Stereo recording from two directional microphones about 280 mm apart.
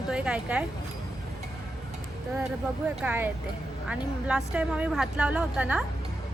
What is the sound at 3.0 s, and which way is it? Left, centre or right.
Speech, centre.